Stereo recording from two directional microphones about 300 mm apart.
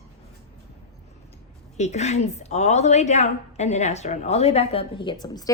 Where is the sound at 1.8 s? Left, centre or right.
Left.